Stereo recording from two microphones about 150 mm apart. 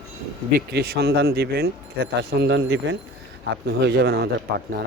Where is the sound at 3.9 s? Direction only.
90° right.